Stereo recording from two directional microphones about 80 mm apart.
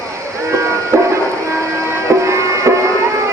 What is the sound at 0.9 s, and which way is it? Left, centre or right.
Music, right.